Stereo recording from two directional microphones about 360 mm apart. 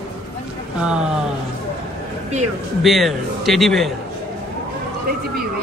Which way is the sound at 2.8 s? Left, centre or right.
Centre.